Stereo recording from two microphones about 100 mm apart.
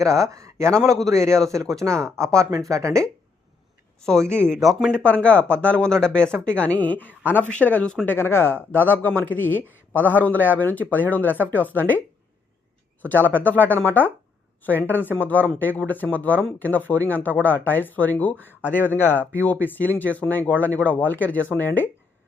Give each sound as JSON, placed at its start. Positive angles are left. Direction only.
{"t": 0.0, "sound": "speech", "side_deg": -30}
{"t": 4.0, "sound": "speech", "side_deg": 5}
{"t": 4.3, "sound": "speech", "side_deg": -20}
{"t": 4.5, "sound": "speech", "side_deg": 0}
{"t": 5.0, "sound": "speech", "side_deg": 15}
{"t": 13.0, "sound": "speech", "side_deg": 20}
{"t": 19.1, "sound": "speech", "side_deg": -20}
{"t": 19.4, "sound": "speech", "side_deg": 15}